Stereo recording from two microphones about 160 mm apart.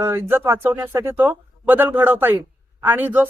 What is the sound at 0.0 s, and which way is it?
Speech, 15° right (ahead or behind).